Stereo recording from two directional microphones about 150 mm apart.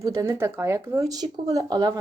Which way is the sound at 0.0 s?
20° right (ahead or behind).